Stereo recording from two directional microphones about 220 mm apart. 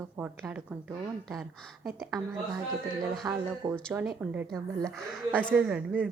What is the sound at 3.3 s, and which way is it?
A woman's voice, 10° right (ahead or behind).